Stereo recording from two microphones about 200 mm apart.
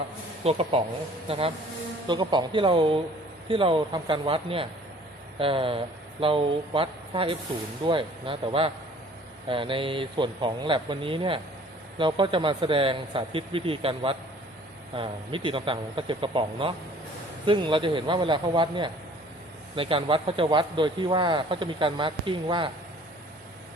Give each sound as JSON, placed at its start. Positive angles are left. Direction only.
{"t": 0.4, "sound": "speech", "side_deg": -30}